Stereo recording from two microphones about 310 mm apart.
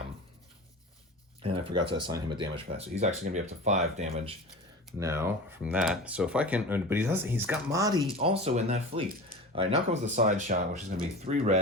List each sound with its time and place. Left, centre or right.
1.4 s speech: centre
4.9 s speech: centre